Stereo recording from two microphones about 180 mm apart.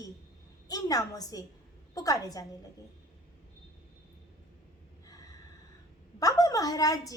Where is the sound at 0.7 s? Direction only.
20° left (ahead or behind).